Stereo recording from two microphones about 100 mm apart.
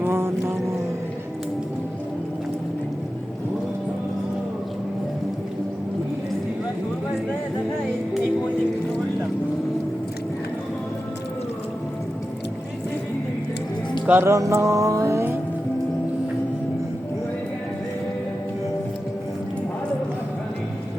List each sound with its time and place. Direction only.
0.0 s music: 25° right (ahead or behind)
14.1 s music: 25° right (ahead or behind)